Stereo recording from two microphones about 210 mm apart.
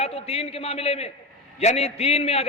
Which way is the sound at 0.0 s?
30° left (ahead or behind).